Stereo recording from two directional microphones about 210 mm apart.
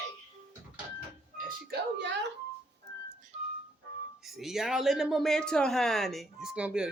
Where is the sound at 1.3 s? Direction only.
50° right (ahead or behind).